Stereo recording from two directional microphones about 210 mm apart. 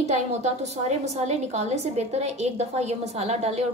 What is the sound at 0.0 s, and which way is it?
A woman's voice, 30° right (ahead or behind).